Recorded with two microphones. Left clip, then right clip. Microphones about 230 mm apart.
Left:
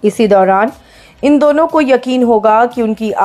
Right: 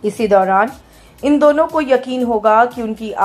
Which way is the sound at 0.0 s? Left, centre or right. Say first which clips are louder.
Left 4 dB; left.